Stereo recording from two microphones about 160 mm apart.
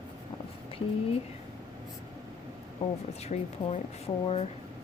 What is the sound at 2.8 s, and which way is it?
Speech, 40° left (ahead or behind).